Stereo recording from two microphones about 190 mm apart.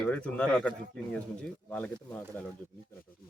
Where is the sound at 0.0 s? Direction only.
5° left (ahead or behind).